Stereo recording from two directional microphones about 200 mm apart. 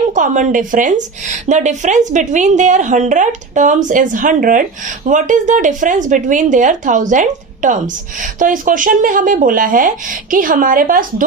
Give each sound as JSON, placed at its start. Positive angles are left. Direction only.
{"t": 0.1, "sound": "a woman's voice", "side_deg": -40}